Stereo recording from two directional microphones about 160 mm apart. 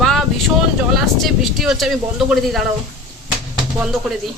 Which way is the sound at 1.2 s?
Centre (ahead or behind).